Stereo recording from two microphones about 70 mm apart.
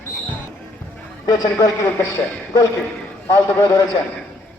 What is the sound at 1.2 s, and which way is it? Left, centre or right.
A man's voice, left.